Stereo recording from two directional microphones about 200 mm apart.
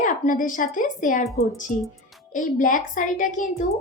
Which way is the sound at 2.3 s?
40° left (ahead or behind).